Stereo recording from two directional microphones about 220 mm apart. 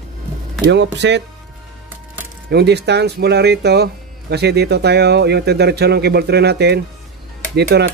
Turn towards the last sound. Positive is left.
turn(degrees=-50)  # may be behind; listen again after turning